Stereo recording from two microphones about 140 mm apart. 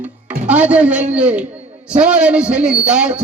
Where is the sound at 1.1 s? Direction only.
10° right (ahead or behind).